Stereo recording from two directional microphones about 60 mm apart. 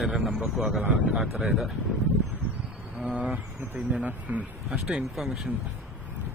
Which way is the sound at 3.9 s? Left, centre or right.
Right.